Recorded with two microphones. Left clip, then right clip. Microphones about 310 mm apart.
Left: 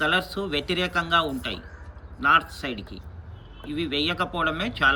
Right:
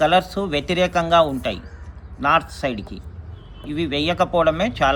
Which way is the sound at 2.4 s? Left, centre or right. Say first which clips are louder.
Right 3 dB; right.